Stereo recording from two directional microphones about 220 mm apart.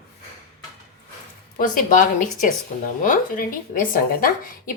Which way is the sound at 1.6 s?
35° left (ahead or behind).